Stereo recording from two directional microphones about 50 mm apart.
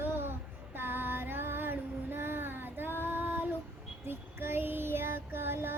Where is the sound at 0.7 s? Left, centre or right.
Right.